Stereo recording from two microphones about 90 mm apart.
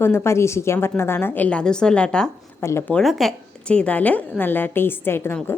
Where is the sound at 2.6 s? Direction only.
25° left (ahead or behind).